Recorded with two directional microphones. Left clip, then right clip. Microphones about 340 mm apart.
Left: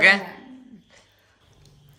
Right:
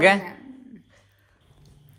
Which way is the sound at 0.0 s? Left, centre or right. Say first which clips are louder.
Left 1 dB; centre.